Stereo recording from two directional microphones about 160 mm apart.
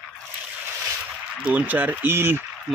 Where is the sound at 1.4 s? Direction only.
10° right (ahead or behind).